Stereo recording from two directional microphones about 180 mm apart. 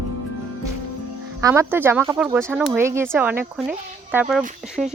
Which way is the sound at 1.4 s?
15° right (ahead or behind).